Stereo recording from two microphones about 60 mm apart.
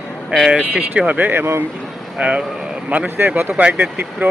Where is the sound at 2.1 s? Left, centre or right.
Centre.